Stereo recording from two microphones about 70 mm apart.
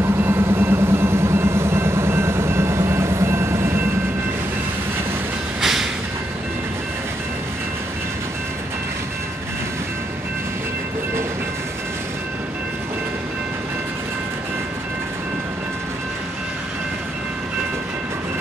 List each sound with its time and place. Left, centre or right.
0.0 s vehicle: right
5.6 s train: centre